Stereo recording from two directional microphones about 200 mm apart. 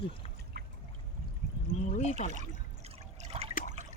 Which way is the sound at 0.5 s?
55° right (ahead or behind).